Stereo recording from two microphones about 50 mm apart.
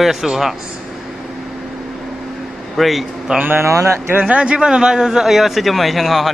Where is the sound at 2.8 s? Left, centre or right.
Centre.